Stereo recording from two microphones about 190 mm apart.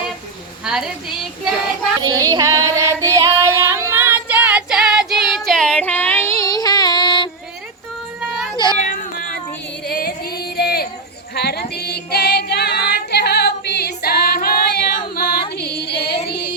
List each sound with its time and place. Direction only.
0.6 s speech: centre (ahead or behind)
2.0 s female singing: 20° right (ahead or behind); by 7.3 s 25° left (ahead or behind)
8.8 s cat: 45° left (ahead or behind)
9.8 s music: 55° left (ahead or behind)
11.3 s female singing: 55° left (ahead or behind)